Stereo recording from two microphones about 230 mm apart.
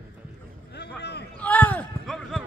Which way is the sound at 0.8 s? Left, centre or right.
Left.